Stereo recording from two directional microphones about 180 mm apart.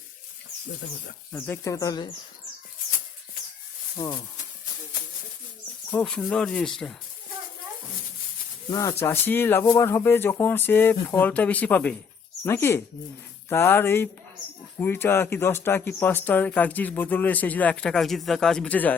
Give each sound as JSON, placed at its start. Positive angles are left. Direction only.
{"t": 1.3, "sound": "speech", "side_deg": 15}
{"t": 3.9, "sound": "speech", "side_deg": 20}
{"t": 5.9, "sound": "speech", "side_deg": 5}
{"t": 8.7, "sound": "speech", "side_deg": 15}